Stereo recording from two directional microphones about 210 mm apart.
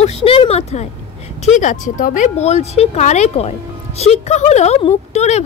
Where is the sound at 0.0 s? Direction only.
25° left (ahead or behind).